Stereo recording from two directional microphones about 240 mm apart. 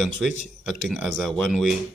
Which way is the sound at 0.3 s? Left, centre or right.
Left.